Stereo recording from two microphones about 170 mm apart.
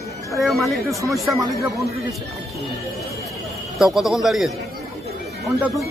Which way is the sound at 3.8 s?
Centre (ahead or behind).